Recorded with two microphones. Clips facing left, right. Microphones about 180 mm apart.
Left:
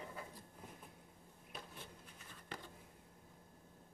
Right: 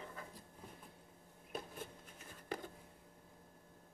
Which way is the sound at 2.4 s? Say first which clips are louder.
Right 7 dB; 45° right (ahead or behind).